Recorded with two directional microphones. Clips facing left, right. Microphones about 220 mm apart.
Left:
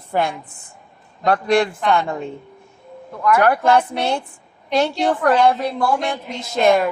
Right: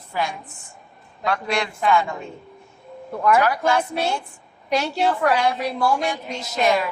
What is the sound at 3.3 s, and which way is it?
Speech, 55° left (ahead or behind).